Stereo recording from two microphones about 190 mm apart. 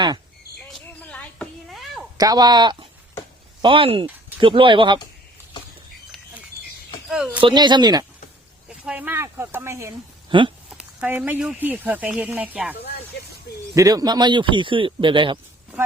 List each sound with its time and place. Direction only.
0.7 s a sound: 5° left (ahead or behind)
2.1 s speech: 20° right (ahead or behind)
7.1 s speech: 5° right (ahead or behind)
7.4 s speech: 25° right (ahead or behind)
8.8 s speech: 10° right (ahead or behind)
10.2 s speech: 25° right (ahead or behind)
10.7 s speech: 5° right (ahead or behind)
13.7 s speech: 20° right (ahead or behind)